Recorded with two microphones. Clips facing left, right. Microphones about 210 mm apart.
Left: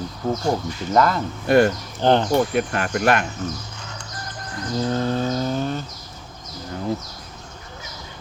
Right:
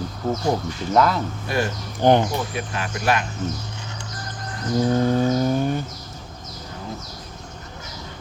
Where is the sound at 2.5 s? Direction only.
55° left (ahead or behind).